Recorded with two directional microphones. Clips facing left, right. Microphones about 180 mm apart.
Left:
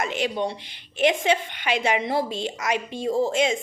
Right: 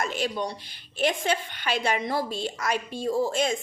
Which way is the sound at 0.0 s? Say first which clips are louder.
Left 3 dB; 20° left (ahead or behind).